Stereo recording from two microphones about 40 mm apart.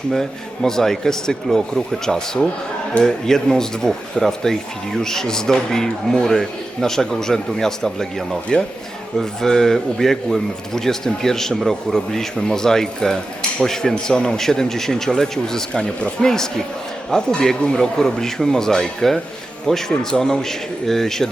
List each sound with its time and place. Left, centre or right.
0.1 s speech: centre
15.7 s speech: left
16.2 s speech: centre